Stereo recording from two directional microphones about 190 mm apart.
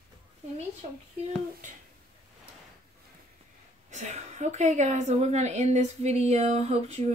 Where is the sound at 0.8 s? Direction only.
35° right (ahead or behind).